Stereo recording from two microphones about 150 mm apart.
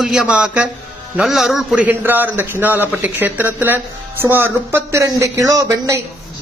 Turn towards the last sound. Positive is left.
turn(degrees=-20)  # may be behind; listen again after turning